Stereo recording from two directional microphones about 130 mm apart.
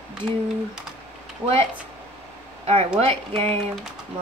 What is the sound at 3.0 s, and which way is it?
Speech, 50° right (ahead or behind).